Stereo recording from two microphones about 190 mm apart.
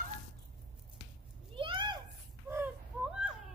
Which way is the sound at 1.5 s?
25° right (ahead or behind).